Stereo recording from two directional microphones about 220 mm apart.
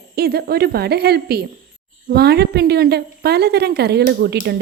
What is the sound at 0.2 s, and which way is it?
A woman's voice, 45° right (ahead or behind).